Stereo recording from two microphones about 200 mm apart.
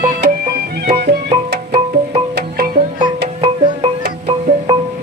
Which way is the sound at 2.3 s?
55° right (ahead or behind).